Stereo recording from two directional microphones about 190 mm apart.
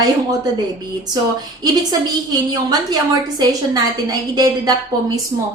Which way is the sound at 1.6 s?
20° right (ahead or behind).